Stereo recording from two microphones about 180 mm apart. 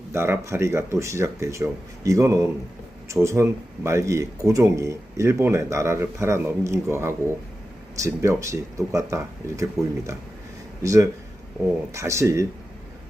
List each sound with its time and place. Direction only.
0.1 s speech: 15° right (ahead or behind)
10.8 s speech: 15° right (ahead or behind)